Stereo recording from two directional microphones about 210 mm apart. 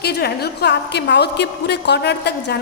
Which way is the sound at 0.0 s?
50° left (ahead or behind).